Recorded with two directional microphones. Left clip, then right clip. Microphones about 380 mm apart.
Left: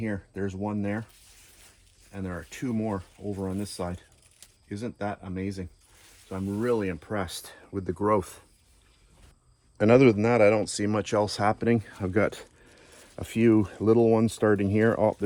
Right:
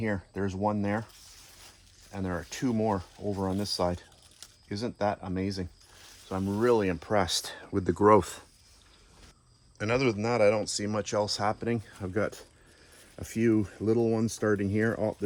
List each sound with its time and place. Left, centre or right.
0.0 s speech: centre
2.1 s speech: centre
9.7 s speech: centre